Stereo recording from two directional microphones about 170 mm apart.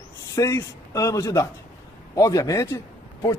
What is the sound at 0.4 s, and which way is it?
A man's voice, 20° left (ahead or behind).